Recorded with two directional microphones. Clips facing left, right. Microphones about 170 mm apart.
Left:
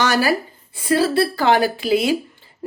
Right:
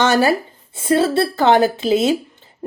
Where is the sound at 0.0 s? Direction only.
25° right (ahead or behind).